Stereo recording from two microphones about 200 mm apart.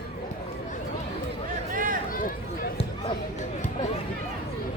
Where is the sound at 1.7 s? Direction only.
40° right (ahead or behind).